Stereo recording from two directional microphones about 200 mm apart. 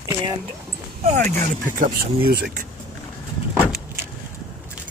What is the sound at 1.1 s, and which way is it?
Speech, 40° right (ahead or behind).